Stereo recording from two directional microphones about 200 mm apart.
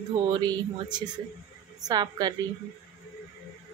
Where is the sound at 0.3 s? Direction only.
20° right (ahead or behind).